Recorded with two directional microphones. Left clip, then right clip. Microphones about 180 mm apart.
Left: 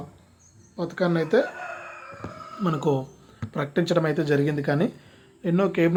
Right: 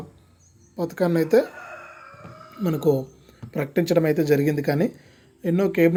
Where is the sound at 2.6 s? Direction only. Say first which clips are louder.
Right 3 dB; 35° right (ahead or behind).